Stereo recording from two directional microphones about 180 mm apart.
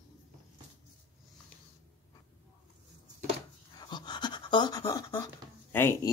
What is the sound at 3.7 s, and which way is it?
Pant, 25° left (ahead or behind).